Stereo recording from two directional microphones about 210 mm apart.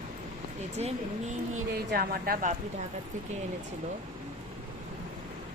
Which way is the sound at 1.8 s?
45° right (ahead or behind).